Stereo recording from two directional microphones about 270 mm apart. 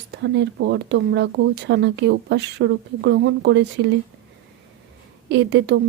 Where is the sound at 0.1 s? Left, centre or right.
Right.